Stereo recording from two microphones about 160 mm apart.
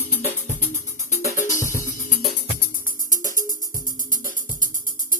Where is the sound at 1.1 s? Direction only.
50° left (ahead or behind).